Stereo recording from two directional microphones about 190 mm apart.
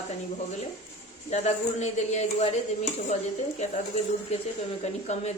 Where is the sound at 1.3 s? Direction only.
35° left (ahead or behind).